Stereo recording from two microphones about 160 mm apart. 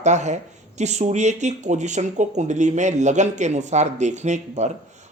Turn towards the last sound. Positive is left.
turn(degrees=-45)  # may be behind; listen again after turning